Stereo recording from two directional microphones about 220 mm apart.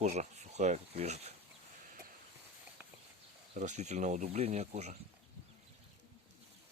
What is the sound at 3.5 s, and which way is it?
Speech, 35° right (ahead or behind).